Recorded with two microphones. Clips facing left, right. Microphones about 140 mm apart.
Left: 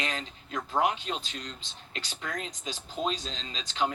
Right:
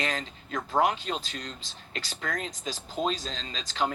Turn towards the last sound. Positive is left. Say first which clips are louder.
# right 1 dB
turn(degrees=-40)  # may be behind; listen again after turning